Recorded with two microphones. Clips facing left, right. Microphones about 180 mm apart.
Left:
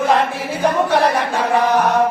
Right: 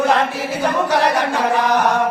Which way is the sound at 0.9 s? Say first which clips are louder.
Left 1 dB; 90° right.